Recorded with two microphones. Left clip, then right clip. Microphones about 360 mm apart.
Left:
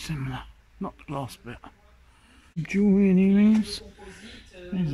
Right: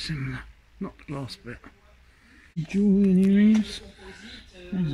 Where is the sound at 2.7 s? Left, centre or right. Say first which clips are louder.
Left 1 dB; left.